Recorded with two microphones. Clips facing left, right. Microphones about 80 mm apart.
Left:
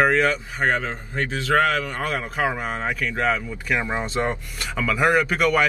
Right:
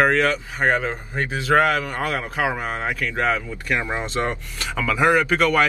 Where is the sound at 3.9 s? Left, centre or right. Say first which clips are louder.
Even; centre.